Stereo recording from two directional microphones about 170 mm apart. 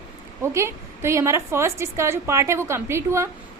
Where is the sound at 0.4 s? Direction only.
15° right (ahead or behind).